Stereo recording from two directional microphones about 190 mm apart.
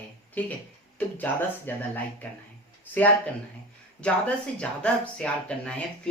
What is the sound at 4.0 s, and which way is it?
Speech, 5° left (ahead or behind).